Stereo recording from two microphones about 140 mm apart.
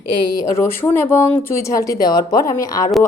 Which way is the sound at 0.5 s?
15° left (ahead or behind).